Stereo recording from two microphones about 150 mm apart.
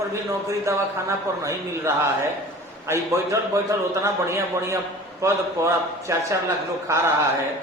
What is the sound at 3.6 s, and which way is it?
A man's voice, 20° right (ahead or behind).